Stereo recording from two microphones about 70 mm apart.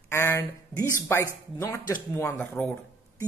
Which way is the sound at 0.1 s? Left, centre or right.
Left.